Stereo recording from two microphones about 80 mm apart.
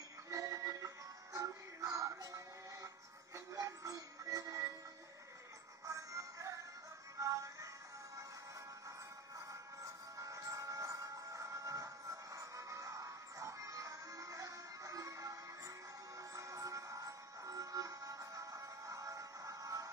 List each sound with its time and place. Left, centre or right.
0.3 s music: right
5.9 s music: right
10.1 s music: right